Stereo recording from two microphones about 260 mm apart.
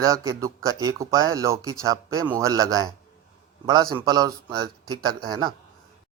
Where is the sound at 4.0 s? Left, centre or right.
Centre.